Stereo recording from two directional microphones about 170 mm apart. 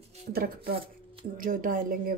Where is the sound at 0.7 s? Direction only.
35° right (ahead or behind).